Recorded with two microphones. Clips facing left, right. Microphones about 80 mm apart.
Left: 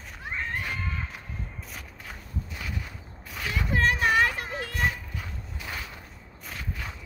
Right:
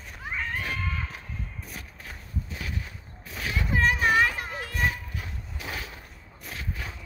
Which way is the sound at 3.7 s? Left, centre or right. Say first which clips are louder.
Right 1 dB; centre.